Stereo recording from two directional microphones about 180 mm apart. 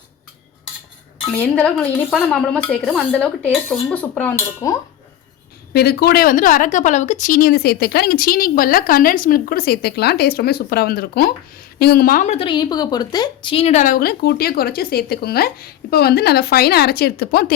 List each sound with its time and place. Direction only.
1.4 s a woman's voice: 5° left (ahead or behind)
5.7 s speech: 60° left (ahead or behind)